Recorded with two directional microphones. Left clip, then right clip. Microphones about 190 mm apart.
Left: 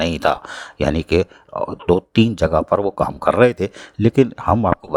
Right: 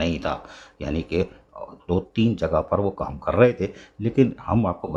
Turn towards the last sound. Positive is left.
turn(degrees=45)  # may be behind; listen again after turning